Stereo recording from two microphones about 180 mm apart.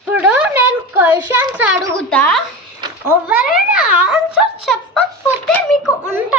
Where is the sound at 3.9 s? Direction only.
5° right (ahead or behind).